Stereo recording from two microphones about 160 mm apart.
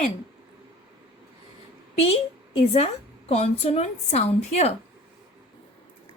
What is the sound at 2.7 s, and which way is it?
A woman's voice, 40° left (ahead or behind).